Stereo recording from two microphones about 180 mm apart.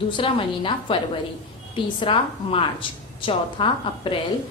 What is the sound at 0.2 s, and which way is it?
A woman's voice, 30° left (ahead or behind).